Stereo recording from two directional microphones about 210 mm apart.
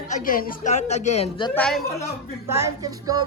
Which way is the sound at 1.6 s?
5° left (ahead or behind).